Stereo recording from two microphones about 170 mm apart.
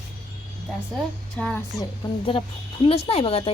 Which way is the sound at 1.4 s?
5° left (ahead or behind).